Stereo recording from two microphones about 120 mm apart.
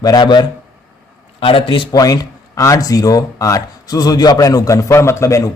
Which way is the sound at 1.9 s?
30° left (ahead or behind).